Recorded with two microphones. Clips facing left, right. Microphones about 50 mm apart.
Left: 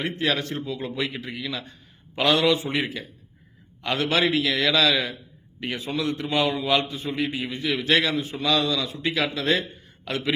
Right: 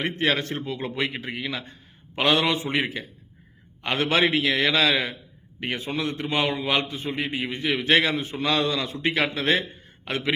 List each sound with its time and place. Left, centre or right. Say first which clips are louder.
0.0 s a man's voice: right 1 dB; right